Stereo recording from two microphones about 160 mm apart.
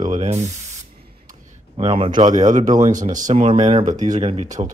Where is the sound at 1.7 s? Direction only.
35° right (ahead or behind).